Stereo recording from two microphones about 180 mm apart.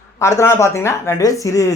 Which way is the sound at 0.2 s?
15° left (ahead or behind).